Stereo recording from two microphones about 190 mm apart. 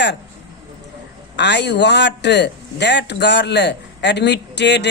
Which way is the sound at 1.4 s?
65° left (ahead or behind).